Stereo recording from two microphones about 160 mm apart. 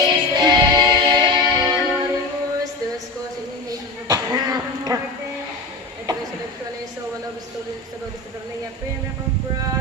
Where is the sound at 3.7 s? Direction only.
20° right (ahead or behind).